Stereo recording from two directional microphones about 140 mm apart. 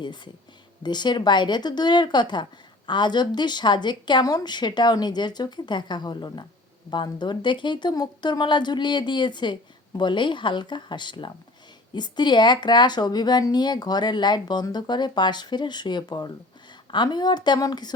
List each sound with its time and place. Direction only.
0.8 s speech: 30° left (ahead or behind)